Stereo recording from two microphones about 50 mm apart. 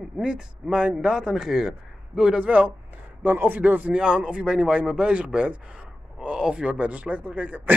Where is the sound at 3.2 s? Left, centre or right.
Right.